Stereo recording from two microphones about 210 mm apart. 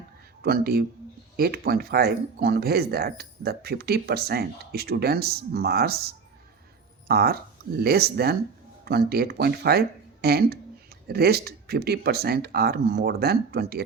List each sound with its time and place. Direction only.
0.4 s speech: 50° right (ahead or behind)